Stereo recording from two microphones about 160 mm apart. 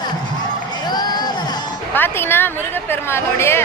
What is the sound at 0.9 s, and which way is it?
Crowd, 25° left (ahead or behind).